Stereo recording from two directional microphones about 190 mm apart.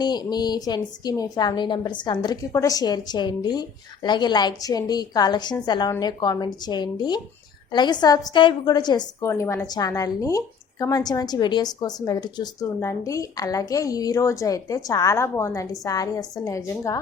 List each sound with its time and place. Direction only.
0.0 s a woman's voice: 20° left (ahead or behind)